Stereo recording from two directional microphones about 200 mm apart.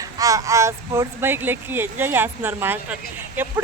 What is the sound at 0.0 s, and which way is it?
Speech, 15° right (ahead or behind).